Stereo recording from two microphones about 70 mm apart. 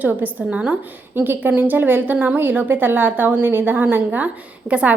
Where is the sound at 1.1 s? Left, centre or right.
Right.